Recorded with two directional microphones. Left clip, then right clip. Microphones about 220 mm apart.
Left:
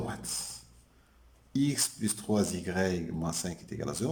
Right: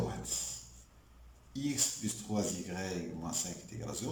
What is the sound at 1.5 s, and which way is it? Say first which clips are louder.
A man's voice: left 5 dB; 50° left (ahead or behind).